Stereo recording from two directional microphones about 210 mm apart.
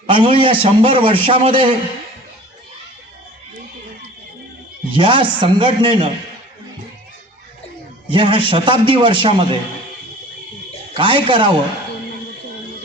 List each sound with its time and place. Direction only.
0.1 s a man's voice: 25° right (ahead or behind)
4.9 s a man's voice: 25° right (ahead or behind)
8.1 s a man's voice: 25° right (ahead or behind)
10.9 s a man's voice: 25° right (ahead or behind)